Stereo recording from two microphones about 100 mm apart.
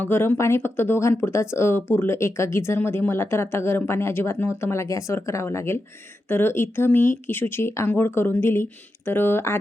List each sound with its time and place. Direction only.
0.0 s speech: 25° left (ahead or behind)